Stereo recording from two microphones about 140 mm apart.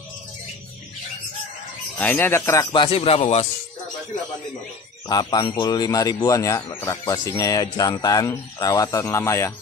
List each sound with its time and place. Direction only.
2.0 s speech: 15° left (ahead or behind)
2.6 s a man's voice: 35° left (ahead or behind)
5.0 s speech: 30° left (ahead or behind)